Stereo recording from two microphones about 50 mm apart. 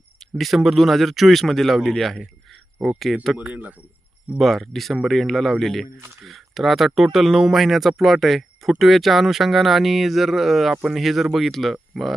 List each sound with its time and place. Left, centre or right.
0.3 s speech: centre
3.3 s speech: right
4.4 s speech: centre